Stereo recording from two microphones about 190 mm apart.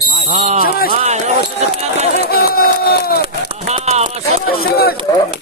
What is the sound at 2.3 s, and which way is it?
Speech, 55° left (ahead or behind).